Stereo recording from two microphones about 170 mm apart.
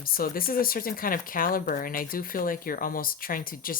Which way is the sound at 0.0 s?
60° left (ahead or behind).